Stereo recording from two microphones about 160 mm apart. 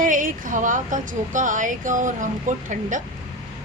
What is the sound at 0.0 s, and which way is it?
A woman's voice, 55° right (ahead or behind).